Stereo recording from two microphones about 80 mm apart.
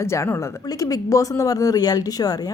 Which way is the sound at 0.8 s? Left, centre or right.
Left.